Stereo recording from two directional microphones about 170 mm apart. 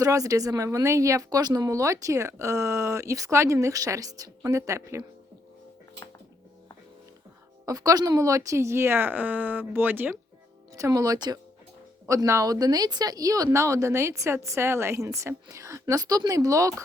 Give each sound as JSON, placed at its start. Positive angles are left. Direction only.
{"t": 0.0, "sound": "speech", "side_deg": -20}
{"t": 7.6, "sound": "speech", "side_deg": -20}